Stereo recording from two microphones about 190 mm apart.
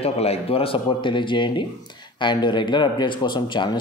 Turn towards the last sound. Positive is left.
turn(degrees=25)  # may be behind; listen again after turning